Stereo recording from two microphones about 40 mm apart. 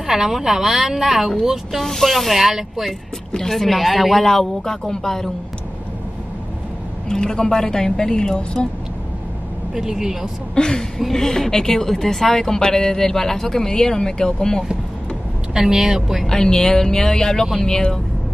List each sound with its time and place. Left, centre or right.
0.0 s a woman's voice: centre
1.8 s speech: centre
3.3 s a woman's voice: centre
7.1 s a woman's voice: centre
9.8 s a woman's voice: centre
10.5 s a woman's voice: centre
15.5 s a woman's voice: centre
16.3 s a woman's voice: centre